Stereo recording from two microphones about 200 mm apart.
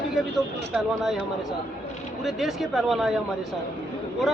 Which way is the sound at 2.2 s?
Centre (ahead or behind).